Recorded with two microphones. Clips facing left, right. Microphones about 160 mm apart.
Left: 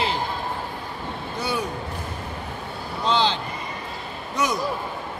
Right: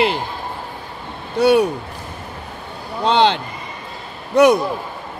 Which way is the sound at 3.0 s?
65° right (ahead or behind).